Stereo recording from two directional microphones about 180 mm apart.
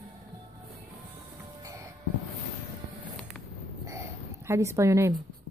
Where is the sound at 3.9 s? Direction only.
15° right (ahead or behind).